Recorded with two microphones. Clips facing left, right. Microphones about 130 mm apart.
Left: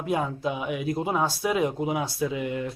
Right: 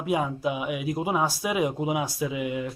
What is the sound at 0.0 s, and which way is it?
Speech, 10° right (ahead or behind).